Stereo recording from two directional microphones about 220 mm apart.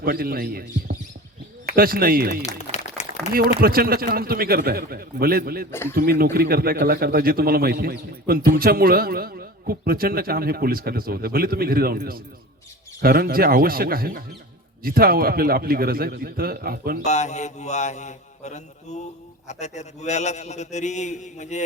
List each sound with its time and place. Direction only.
0.0 s speech: 40° right (ahead or behind)
3.0 s a sound: 30° left (ahead or behind)
3.3 s speech: 40° right (ahead or behind)
17.0 s a man's voice: 30° left (ahead or behind)